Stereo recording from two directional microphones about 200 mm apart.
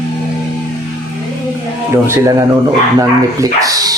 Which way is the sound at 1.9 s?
15° right (ahead or behind).